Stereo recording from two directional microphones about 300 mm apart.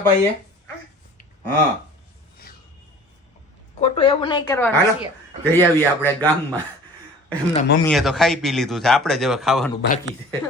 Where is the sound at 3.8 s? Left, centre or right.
Centre.